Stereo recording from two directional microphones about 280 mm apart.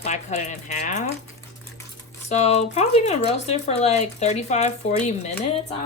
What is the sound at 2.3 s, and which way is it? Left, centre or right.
Speech, left.